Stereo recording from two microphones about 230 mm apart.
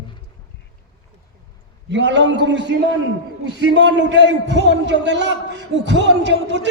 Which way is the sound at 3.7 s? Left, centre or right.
Right.